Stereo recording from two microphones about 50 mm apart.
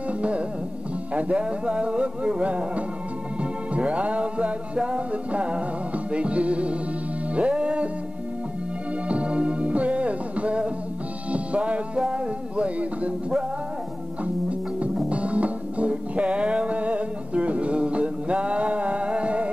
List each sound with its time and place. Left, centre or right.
1.1 s music: right
9.1 s music: right
15.0 s music: right